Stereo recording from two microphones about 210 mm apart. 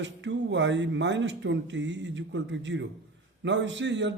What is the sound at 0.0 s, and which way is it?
Speech, 60° right (ahead or behind).